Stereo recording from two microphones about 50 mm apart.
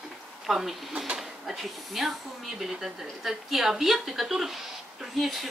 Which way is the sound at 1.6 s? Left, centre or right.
Centre.